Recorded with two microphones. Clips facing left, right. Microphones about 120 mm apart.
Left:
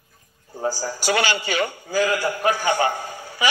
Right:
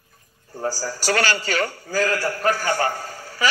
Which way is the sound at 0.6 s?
15° left (ahead or behind).